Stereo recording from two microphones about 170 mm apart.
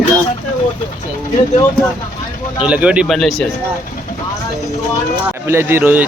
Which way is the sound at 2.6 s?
5° right (ahead or behind).